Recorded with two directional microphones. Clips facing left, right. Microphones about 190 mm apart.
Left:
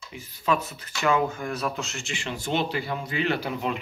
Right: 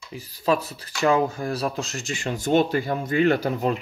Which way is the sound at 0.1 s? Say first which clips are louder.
Right 3 dB; 35° right (ahead or behind).